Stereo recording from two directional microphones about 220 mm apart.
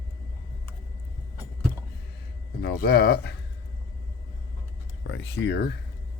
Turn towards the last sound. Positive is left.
turn(degrees=50)  # may be behind; listen again after turning